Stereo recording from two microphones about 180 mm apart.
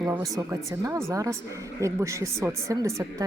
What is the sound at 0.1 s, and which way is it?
Speech, 15° right (ahead or behind).